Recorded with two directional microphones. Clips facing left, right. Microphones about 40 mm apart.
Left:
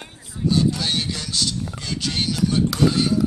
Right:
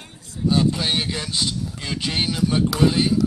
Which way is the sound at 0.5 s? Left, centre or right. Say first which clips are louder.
Right 1 dB; right.